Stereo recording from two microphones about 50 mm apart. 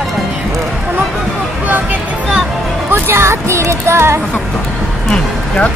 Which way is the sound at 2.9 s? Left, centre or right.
Right.